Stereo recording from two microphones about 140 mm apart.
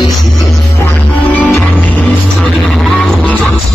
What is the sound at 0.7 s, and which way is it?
Music, 15° left (ahead or behind).